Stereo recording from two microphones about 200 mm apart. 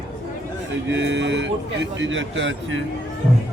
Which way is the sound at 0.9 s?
60° right (ahead or behind).